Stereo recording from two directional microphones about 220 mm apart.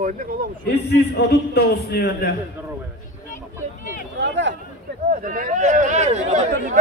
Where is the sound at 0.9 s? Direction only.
45° left (ahead or behind).